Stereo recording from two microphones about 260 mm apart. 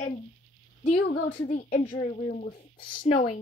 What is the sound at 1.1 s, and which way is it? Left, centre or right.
A child's voice, left.